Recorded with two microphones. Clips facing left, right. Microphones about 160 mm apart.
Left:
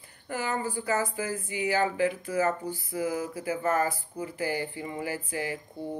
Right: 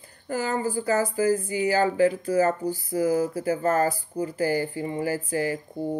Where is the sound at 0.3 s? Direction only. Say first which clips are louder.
Right 5 dB; 35° right (ahead or behind).